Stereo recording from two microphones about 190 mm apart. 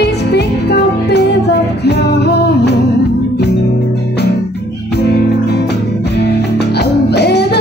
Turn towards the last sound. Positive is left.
turn(degrees=60)  # may be behind; listen again after turning